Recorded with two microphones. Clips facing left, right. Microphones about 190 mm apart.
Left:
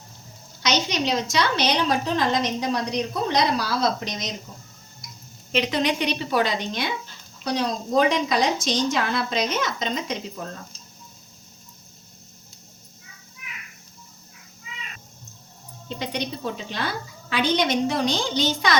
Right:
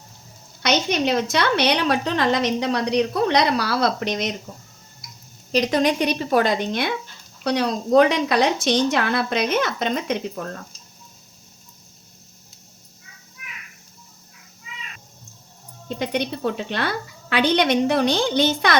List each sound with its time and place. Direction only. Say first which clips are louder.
0.6 s a woman's voice: right 3 dB; 55° right (ahead or behind)
5.5 s a woman's voice: right 4 dB; 40° right (ahead or behind)
7.4 s a woman's voice: right 4 dB; 65° right (ahead or behind)
16.0 s a woman's voice: right 5 dB; 60° right (ahead or behind)